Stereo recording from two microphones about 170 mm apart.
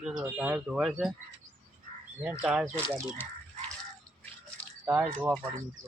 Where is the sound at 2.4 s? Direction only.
5° right (ahead or behind).